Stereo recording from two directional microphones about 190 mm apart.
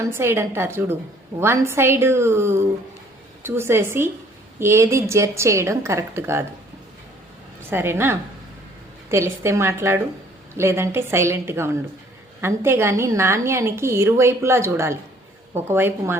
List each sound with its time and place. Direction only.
0.0 s a woman's voice: 15° right (ahead or behind)
7.7 s a woman's voice: 10° right (ahead or behind)